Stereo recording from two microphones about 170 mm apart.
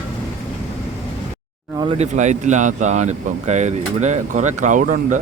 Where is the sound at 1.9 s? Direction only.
45° right (ahead or behind).